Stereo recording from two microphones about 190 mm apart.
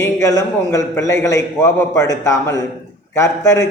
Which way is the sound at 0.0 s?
15° left (ahead or behind).